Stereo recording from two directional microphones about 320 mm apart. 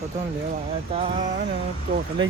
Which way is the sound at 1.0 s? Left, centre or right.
Centre.